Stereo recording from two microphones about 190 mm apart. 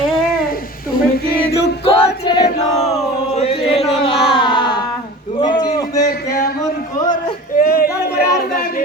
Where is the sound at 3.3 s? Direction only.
35° left (ahead or behind).